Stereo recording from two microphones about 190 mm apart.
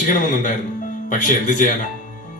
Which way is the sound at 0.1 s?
40° left (ahead or behind).